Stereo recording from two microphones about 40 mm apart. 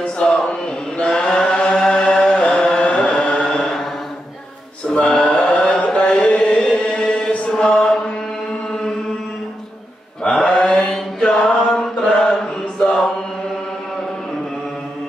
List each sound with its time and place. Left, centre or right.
0.0 s chant: centre
4.9 s chant: left
6.9 s mantra: left
10.3 s mantra: centre
11.1 s chant: centre